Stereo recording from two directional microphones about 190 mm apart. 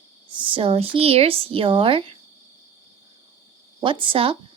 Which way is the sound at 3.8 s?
25° right (ahead or behind).